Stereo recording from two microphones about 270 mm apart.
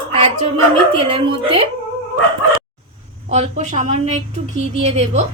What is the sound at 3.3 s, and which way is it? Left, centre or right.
Speech, right.